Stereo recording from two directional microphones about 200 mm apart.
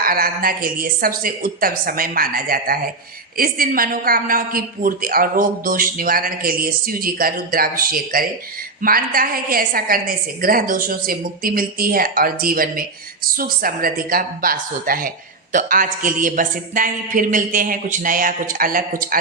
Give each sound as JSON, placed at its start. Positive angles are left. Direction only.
{"t": 0.0, "sound": "a woman's voice", "side_deg": -45}